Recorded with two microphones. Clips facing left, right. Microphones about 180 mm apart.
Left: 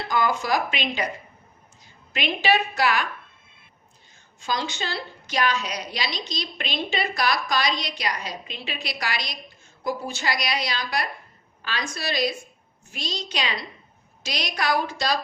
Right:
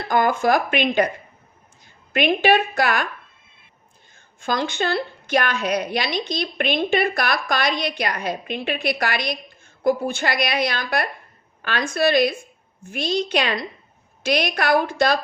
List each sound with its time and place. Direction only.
0.0 s a woman's voice: 55° right (ahead or behind)
4.1 s a woman's voice: 55° right (ahead or behind)